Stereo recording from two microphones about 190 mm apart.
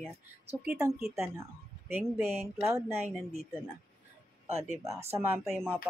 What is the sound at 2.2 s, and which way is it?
Speech, centre (ahead or behind).